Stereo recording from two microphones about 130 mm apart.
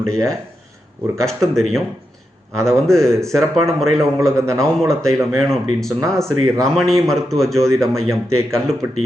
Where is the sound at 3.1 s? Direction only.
25° right (ahead or behind).